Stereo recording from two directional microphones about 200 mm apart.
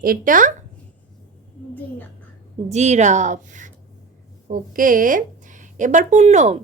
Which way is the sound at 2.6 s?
35° right (ahead or behind).